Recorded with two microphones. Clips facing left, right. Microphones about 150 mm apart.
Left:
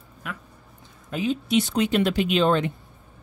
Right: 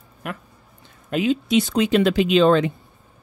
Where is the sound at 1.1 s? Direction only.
85° right.